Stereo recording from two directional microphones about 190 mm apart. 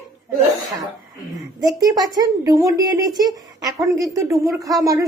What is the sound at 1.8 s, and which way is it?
A woman's voice, 20° right (ahead or behind).